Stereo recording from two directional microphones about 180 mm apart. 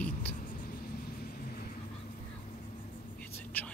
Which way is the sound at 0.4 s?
50° left (ahead or behind).